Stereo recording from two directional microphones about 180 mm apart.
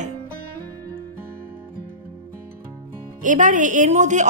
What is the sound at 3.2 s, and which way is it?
A woman's voice, 45° right (ahead or behind).